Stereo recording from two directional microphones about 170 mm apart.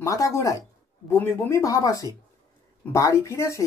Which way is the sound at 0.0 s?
20° left (ahead or behind).